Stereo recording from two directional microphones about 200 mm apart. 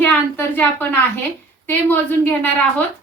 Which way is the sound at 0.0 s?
10° left (ahead or behind).